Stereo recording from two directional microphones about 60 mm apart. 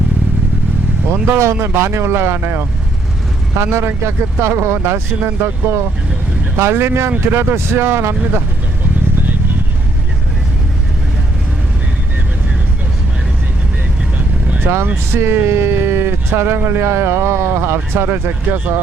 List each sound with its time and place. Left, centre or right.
1.1 s speech: right
14.6 s speech: right
15.1 s speech: right